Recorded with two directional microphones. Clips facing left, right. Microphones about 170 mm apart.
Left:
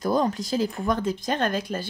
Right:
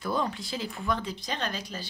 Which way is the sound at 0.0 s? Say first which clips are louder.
Left 7 dB; 40° left (ahead or behind).